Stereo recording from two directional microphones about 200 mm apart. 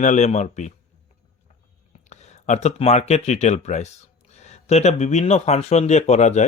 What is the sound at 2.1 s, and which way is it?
Speech, 35° left (ahead or behind).